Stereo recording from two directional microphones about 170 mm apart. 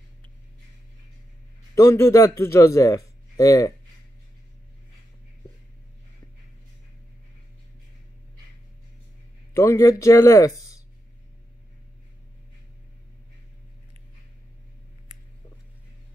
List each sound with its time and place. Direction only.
1.8 s a man's voice: 15° left (ahead or behind)
9.5 s speech: 15° left (ahead or behind)